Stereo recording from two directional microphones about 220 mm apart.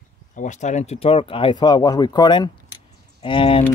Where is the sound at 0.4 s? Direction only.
35° left (ahead or behind).